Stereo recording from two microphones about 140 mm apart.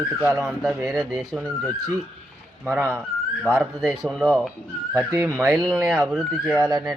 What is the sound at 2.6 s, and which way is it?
Speech, 15° right (ahead or behind).